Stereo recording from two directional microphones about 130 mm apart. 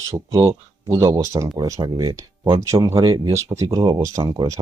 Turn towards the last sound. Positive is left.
turn(degrees=-30)  # may be behind; listen again after turning